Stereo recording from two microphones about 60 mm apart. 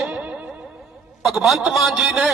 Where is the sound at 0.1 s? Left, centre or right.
Right.